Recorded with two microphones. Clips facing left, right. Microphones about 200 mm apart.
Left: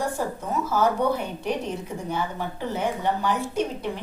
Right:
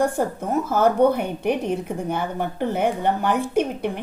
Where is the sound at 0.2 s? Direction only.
55° right (ahead or behind).